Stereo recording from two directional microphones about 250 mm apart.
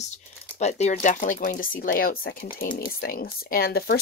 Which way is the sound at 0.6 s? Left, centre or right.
Left.